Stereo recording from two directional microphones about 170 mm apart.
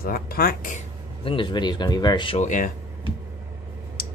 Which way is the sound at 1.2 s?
30° left (ahead or behind).